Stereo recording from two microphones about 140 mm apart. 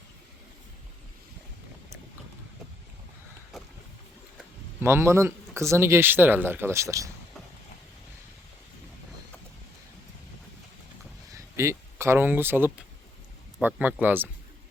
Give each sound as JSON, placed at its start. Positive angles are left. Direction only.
{"t": 3.5, "sound": "boat", "side_deg": 0}
{"t": 4.8, "sound": "speech", "side_deg": -15}
{"t": 11.3, "sound": "speech", "side_deg": -20}